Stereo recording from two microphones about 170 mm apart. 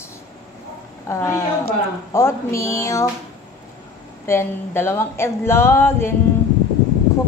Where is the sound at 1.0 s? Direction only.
15° left (ahead or behind).